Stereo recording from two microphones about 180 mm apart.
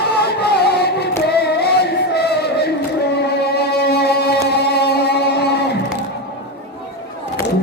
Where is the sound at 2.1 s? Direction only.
65° left (ahead or behind).